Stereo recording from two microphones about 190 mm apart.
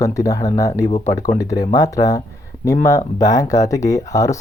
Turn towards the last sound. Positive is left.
turn(degrees=15)  # may be behind; listen again after turning